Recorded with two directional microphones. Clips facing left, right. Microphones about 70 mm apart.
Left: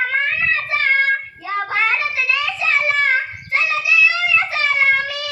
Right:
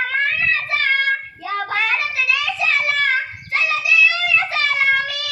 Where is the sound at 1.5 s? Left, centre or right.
Left.